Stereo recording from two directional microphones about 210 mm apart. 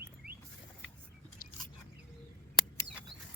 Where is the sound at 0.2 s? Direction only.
45° right (ahead or behind).